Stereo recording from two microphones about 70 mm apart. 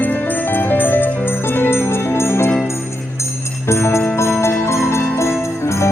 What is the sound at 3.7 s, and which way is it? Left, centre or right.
Music, left.